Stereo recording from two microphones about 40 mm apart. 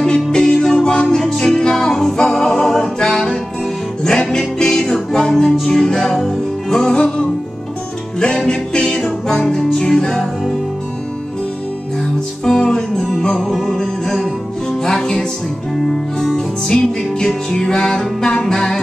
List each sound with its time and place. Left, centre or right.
0.3 s music: centre
1.1 s music: centre
1.4 s music: centre
8.5 s music: centre
12.5 s music: centre
13.4 s music: centre